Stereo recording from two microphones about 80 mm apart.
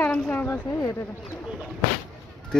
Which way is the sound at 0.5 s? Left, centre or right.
Left.